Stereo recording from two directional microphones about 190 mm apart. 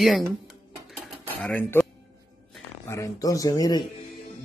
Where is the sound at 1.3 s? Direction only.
10° left (ahead or behind).